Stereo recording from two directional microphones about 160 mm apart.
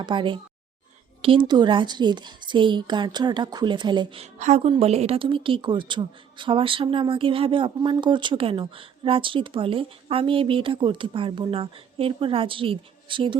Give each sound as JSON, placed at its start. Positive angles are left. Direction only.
{"t": 0.0, "sound": "a woman's voice", "side_deg": -30}
{"t": 4.4, "sound": "a woman's voice", "side_deg": -45}